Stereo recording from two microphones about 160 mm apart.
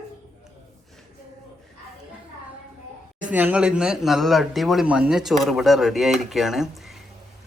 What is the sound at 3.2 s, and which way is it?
Speech, 10° right (ahead or behind).